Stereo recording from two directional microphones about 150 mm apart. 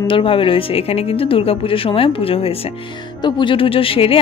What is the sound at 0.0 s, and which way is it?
A woman's voice, 35° left (ahead or behind).